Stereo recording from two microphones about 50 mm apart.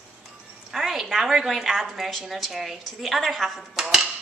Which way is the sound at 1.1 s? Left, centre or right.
Centre.